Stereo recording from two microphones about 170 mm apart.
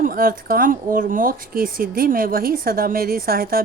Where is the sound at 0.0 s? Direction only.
60° right (ahead or behind).